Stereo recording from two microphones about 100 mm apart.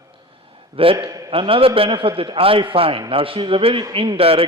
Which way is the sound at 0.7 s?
65° right (ahead or behind).